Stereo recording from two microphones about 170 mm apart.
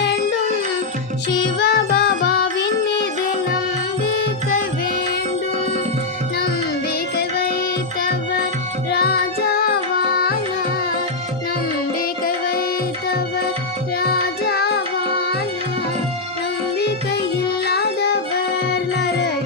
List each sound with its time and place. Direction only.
1.3 s music: 80° left
4.2 s music: 55° left (ahead or behind)
7.2 s music: 60° left (ahead or behind)
8.9 s music: 70° left (ahead or behind)
12.2 s tabla: 60° left (ahead or behind)
14.0 s music: 65° left (ahead or behind)
17.7 s music: 70° left (ahead or behind)